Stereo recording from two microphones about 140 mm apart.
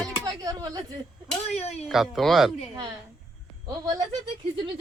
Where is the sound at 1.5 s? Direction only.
50° left (ahead or behind).